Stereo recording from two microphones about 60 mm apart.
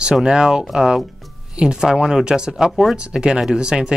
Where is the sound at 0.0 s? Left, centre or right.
Centre.